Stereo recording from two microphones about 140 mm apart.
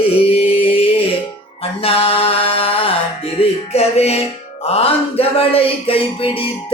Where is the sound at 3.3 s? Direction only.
45° left (ahead or behind).